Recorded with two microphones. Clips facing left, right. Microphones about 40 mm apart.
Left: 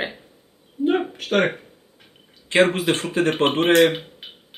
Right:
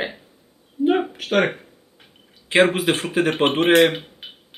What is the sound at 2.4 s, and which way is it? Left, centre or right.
Speech, centre.